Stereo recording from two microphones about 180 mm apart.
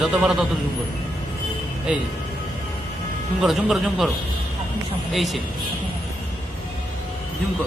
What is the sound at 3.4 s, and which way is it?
Speech, centre (ahead or behind).